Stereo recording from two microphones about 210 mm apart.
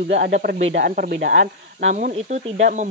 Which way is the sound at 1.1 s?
60° right (ahead or behind).